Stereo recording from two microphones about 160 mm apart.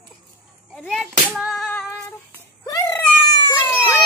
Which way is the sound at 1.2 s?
5° right (ahead or behind).